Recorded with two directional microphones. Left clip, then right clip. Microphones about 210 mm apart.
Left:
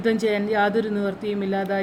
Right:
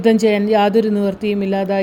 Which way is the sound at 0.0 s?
30° right (ahead or behind).